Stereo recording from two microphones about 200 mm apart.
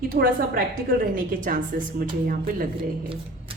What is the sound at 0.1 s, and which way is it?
Speech, 50° right (ahead or behind).